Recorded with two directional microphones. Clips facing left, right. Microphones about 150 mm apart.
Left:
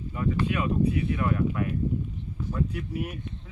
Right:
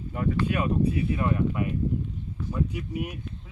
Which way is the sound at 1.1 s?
25° right (ahead or behind).